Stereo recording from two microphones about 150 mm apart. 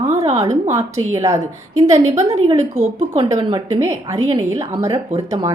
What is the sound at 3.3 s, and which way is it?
Speech, 30° right (ahead or behind).